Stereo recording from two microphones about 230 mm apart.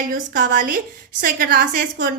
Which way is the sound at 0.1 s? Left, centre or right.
Right.